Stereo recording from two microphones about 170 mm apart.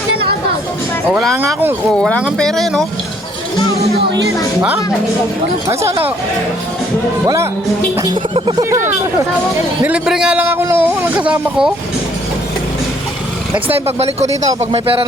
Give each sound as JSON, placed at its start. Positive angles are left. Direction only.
{"t": 2.0, "sound": "speech", "side_deg": 5}
{"t": 5.6, "sound": "a man's voice", "side_deg": -20}
{"t": 8.1, "sound": "speech", "side_deg": -30}
{"t": 9.8, "sound": "a man's voice", "side_deg": -5}
{"t": 13.5, "sound": "speech", "side_deg": -35}